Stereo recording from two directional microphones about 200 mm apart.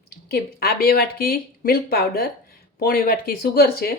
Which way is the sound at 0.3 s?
50° left (ahead or behind).